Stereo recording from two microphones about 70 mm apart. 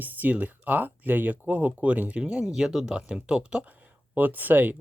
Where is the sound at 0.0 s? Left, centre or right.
Right.